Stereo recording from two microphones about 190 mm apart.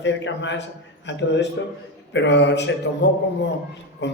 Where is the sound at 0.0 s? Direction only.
70° left (ahead or behind).